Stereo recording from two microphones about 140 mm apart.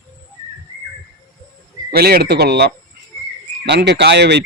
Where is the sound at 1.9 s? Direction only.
90° right.